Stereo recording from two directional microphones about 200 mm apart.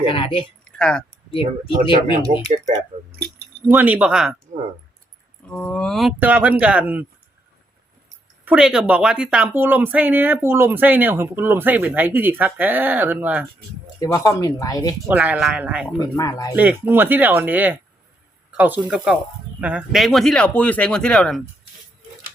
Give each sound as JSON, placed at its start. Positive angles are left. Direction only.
{"t": 0.0, "sound": "speech", "side_deg": 25}
{"t": 0.6, "sound": "a sound", "side_deg": 5}
{"t": 1.3, "sound": "speech", "side_deg": 25}
{"t": 2.3, "sound": "speech", "side_deg": -35}
{"t": 2.6, "sound": "speech", "side_deg": -50}
{"t": 3.7, "sound": "speech", "side_deg": -10}
{"t": 5.5, "sound": "speech", "side_deg": 5}
{"t": 8.4, "sound": "speech", "side_deg": -5}
{"t": 14.0, "sound": "speech", "side_deg": 15}
{"t": 15.0, "sound": "speech", "side_deg": -5}
{"t": 16.0, "sound": "speech", "side_deg": 15}
{"t": 16.6, "sound": "speech", "side_deg": -10}